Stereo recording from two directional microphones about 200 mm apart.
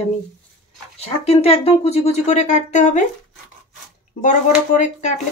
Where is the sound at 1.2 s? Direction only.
30° left (ahead or behind).